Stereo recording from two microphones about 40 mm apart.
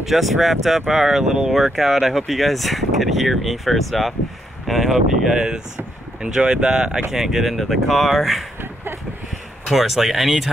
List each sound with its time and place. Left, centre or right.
0.0 s speech: centre
9.7 s speech: centre